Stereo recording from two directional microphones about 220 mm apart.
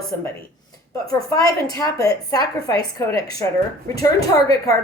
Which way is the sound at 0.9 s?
15° left (ahead or behind).